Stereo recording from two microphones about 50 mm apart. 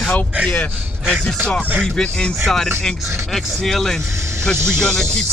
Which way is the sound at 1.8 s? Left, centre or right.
Centre.